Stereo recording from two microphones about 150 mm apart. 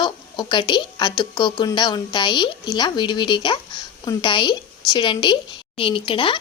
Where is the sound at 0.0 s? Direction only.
30° left (ahead or behind).